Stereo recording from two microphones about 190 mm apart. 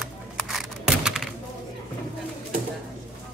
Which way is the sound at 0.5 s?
5° right (ahead or behind).